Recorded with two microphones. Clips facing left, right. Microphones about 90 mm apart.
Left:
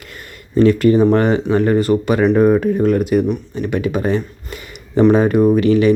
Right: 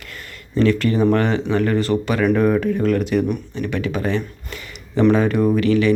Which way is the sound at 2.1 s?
25° left (ahead or behind).